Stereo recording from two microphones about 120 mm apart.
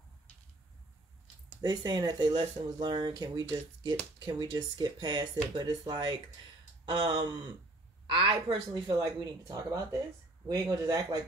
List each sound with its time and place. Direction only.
1.6 s speech: 35° right (ahead or behind)